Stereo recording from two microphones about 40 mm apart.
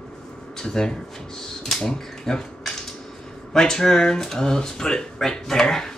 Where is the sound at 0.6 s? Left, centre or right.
Centre.